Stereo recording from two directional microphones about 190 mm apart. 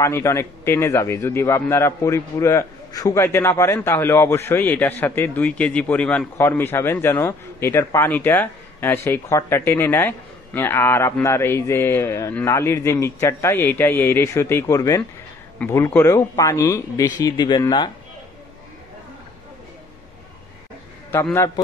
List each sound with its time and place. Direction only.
0.0 s a man's voice: 15° left (ahead or behind)
21.1 s a man's voice: 15° left (ahead or behind)